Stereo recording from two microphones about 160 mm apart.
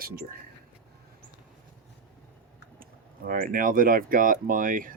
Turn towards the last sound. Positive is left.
turn(degrees=-60)  # may be behind; listen again after turning